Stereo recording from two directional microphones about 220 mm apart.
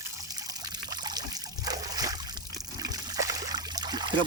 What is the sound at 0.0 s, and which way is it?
Trickle, 15° right (ahead or behind).